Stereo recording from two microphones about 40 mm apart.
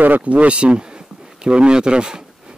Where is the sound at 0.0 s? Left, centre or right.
Right.